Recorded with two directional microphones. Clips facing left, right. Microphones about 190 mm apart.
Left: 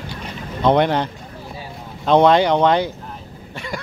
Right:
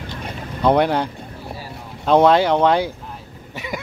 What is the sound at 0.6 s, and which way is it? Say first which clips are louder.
Speech: even; 5° right (ahead or behind).